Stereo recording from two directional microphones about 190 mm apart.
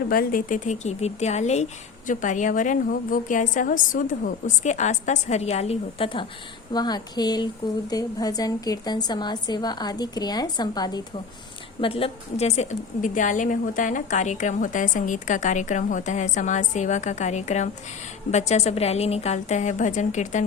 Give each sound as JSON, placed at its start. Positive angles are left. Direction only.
{"t": 0.1, "sound": "a woman's voice", "side_deg": 50}